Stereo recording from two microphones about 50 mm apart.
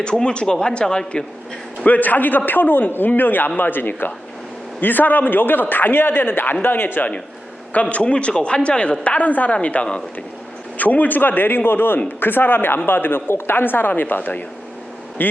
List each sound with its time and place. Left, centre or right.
0.0 s speech: centre
1.8 s a man's voice: left
7.7 s speech: left
10.8 s a man's voice: left